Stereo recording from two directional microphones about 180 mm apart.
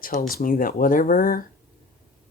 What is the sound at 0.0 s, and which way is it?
Speech, 50° left (ahead or behind).